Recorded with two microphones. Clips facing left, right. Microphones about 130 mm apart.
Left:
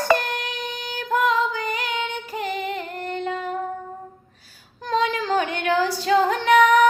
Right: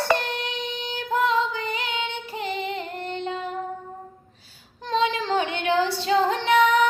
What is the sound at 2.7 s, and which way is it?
Child singing, 25° right (ahead or behind).